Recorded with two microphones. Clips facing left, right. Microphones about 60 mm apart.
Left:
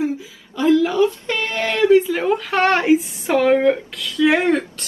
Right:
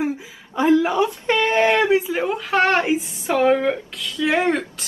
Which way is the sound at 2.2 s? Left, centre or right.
Centre.